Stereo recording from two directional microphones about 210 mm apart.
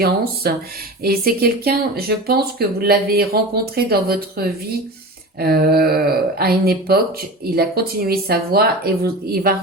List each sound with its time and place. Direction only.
0.4 s speech: 50° right (ahead or behind)